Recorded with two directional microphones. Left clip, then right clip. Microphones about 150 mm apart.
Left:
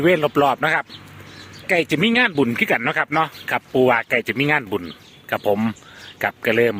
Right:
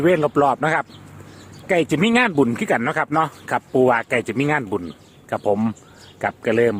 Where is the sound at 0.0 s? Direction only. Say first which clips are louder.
Even; 15° right (ahead or behind).